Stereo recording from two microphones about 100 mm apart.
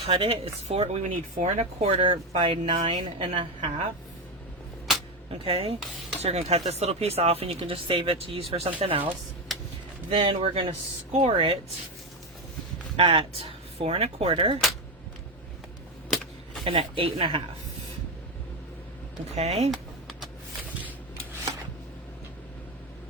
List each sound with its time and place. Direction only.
0.0 s speech: 70° right (ahead or behind); by 0.9 s 90° right
1.4 s speech: 80° right
3.0 s speech: 55° right (ahead or behind)
5.3 s speech: 65° right (ahead or behind)
6.1 s speech: 90° right
7.6 s speech: 60° right (ahead or behind)
10.2 s speech: 60° right (ahead or behind)
11.2 s speech: 55° right (ahead or behind)
13.0 s speech: 75° right (ahead or behind)
16.0 s vehicle: centre (ahead or behind)
16.6 s speech: 65° right (ahead or behind)
19.4 s speech: 90° right